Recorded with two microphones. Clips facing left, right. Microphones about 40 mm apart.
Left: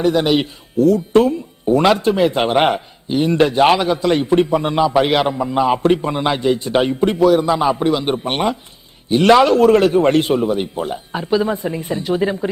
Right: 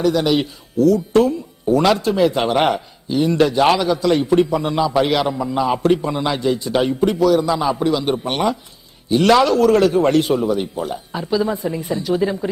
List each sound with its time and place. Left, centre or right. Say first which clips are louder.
0.0 s speech: left 1 dB; left
5.3 s speech: left 3 dB; left